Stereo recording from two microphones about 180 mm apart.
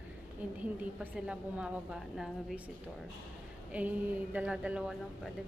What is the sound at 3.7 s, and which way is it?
Speech, 10° right (ahead or behind).